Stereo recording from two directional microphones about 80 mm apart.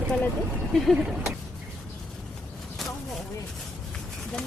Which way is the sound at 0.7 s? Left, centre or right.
Centre.